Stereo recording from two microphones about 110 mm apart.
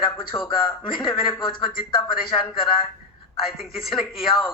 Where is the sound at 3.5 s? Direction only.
Centre (ahead or behind).